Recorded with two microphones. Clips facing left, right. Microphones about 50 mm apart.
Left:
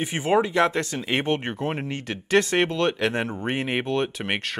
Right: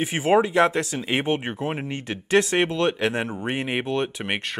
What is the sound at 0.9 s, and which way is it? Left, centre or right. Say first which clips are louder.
Speech: right 1 dB; centre.